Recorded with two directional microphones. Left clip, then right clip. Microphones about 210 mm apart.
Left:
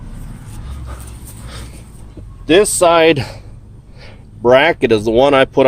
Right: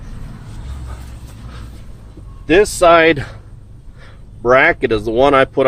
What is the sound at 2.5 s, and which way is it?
Speech, 25° left (ahead or behind).